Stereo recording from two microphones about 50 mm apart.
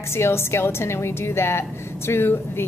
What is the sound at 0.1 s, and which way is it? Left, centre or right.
A woman's voice, left.